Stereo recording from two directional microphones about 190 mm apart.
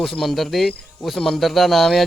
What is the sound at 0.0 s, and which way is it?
Speech, centre (ahead or behind).